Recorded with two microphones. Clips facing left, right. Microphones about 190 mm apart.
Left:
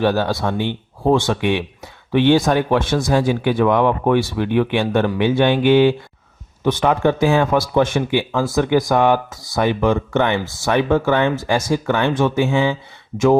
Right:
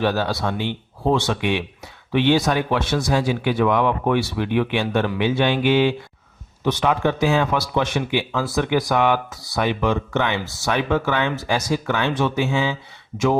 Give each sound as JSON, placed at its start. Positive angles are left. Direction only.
{"t": 0.0, "sound": "speech", "side_deg": 50}